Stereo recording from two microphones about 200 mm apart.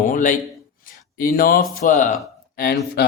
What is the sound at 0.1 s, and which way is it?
Speech, 40° left (ahead or behind).